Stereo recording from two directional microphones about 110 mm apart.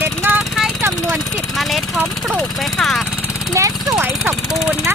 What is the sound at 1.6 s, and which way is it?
Vehicle, centre (ahead or behind).